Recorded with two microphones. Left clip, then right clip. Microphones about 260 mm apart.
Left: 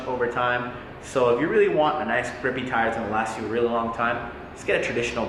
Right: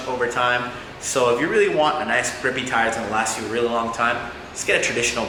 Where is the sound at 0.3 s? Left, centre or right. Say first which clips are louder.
Right 6 dB; centre.